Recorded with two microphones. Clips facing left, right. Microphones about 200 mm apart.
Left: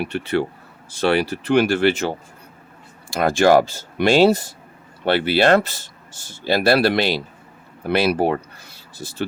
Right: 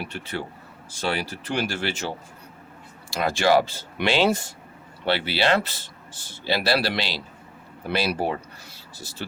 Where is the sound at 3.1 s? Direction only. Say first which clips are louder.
Left 6 dB; 50° left (ahead or behind).